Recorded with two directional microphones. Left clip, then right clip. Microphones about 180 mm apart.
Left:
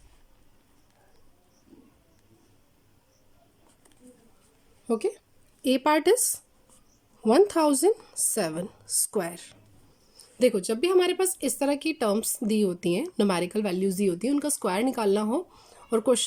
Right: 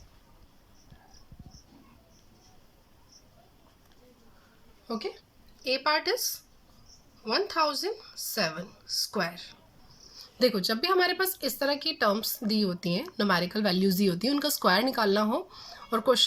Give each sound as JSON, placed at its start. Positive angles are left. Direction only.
{"t": 4.9, "sound": "speech", "side_deg": 30}
{"t": 10.3, "sound": "speech", "side_deg": 15}